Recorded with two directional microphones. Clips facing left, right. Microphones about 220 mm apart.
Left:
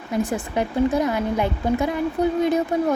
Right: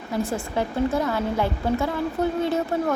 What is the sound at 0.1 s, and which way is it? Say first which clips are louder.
A woman's voice: left 2 dB; 15° left (ahead or behind).